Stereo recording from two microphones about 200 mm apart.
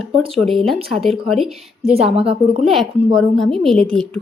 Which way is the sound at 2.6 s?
Centre (ahead or behind).